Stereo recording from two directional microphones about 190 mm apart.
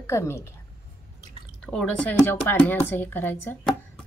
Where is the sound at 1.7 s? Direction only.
5° left (ahead or behind).